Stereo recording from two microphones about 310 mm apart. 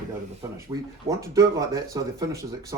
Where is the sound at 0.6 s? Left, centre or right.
Centre.